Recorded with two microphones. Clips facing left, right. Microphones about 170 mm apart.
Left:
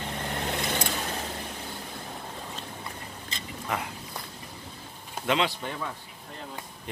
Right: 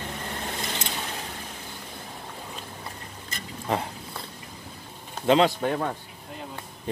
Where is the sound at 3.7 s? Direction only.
30° right (ahead or behind).